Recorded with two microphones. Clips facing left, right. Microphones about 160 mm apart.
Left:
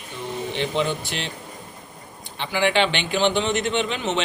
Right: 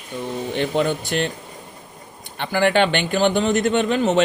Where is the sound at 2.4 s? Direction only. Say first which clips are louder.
Right 3 dB; 50° right (ahead or behind).